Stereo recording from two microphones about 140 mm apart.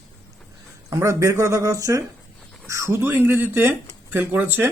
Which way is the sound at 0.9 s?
20° right (ahead or behind).